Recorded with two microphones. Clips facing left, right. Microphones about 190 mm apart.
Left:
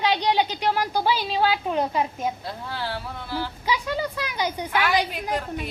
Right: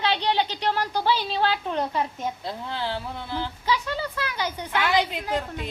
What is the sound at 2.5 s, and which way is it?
Speech, 20° right (ahead or behind).